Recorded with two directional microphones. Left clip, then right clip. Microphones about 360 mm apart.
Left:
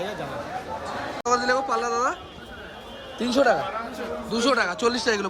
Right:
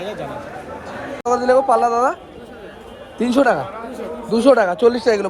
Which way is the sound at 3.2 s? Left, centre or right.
Centre.